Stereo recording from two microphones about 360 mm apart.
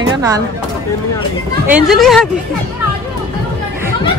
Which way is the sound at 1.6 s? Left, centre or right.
Centre.